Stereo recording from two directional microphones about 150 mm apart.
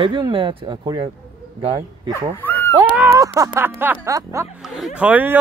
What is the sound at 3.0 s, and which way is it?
Music, 20° right (ahead or behind).